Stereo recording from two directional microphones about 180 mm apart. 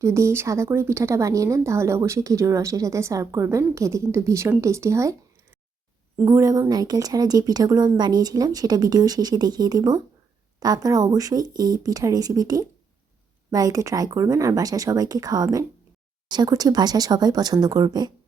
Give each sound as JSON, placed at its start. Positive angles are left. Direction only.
{"t": 0.0, "sound": "speech", "side_deg": -15}
{"t": 6.1, "sound": "speech", "side_deg": -15}